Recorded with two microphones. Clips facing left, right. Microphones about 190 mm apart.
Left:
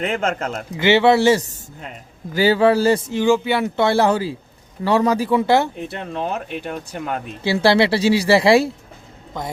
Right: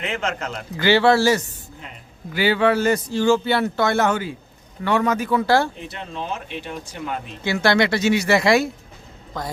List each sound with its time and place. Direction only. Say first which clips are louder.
0.0 s speech: left 4 dB; 50° left (ahead or behind)
0.8 s speech: left 2 dB; 20° left (ahead or behind)
2.3 s speech: left 4 dB; 40° left (ahead or behind)
3.1 s speech: left 1 dB; 15° left (ahead or behind)
3.8 s speech: left 3 dB; 30° left (ahead or behind)
5.9 s speech: left 5 dB; 50° left (ahead or behind)
7.4 s speech: left 3 dB; 30° left (ahead or behind)